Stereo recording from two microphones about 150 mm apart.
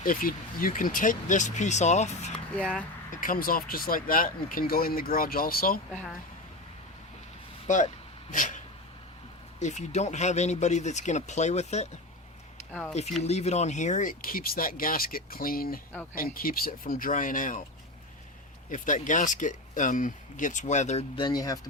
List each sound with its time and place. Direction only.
0.0 s speech: 70° left (ahead or behind); by 2.3 s 50° left (ahead or behind)
2.6 s speech: 5° left (ahead or behind)
3.1 s speech: 65° left (ahead or behind)
8.3 s speech: 55° left (ahead or behind)
13.2 s speech: 45° left (ahead or behind); by 17.6 s 65° left (ahead or behind)
18.7 s speech: 60° left (ahead or behind)
21.2 s speech: 25° left (ahead or behind)